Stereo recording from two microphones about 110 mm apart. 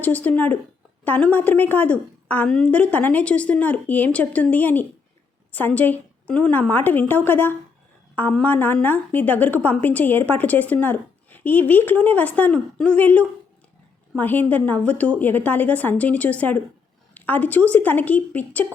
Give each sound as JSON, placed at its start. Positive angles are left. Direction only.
{"t": 0.0, "sound": "a woman's voice", "side_deg": 15}